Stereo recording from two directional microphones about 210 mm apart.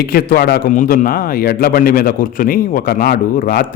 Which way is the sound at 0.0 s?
45° left (ahead or behind).